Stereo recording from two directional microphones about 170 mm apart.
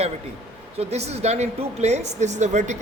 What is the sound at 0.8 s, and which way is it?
A woman's voice, 40° right (ahead or behind).